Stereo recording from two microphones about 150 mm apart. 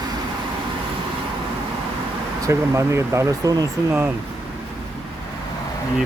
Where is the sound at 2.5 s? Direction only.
20° right (ahead or behind).